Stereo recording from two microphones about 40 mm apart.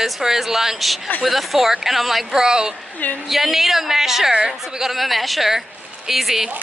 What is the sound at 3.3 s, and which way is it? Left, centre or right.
A woman's voice, centre.